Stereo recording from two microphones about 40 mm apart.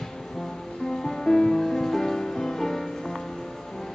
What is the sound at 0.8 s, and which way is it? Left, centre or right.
Music, centre.